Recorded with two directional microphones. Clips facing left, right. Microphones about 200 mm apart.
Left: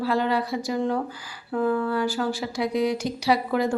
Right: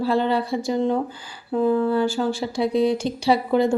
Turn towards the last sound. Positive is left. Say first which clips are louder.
# right 4 dB
turn(degrees=-25)  # may be behind; listen again after turning